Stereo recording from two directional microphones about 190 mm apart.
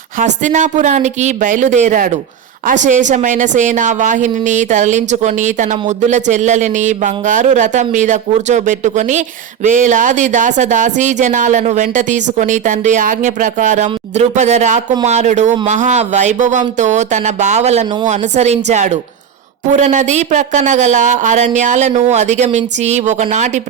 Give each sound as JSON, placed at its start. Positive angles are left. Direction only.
{"t": 0.2, "sound": "speech", "side_deg": -40}